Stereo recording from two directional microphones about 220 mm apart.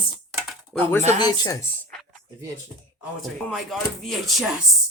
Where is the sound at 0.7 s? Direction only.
Centre (ahead or behind).